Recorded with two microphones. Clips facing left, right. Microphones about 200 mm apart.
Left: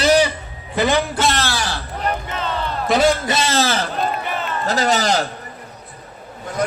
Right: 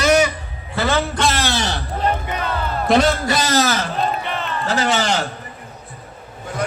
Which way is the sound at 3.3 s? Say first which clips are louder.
Right 1 dB; 25° left (ahead or behind).